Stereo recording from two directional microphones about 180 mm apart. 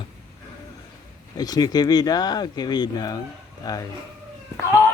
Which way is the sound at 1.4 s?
20° left (ahead or behind).